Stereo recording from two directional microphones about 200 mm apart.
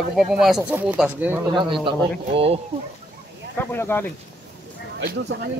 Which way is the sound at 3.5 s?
10° left (ahead or behind).